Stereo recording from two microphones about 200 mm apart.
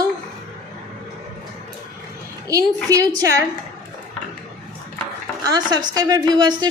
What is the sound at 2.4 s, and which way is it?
Speech, 15° right (ahead or behind).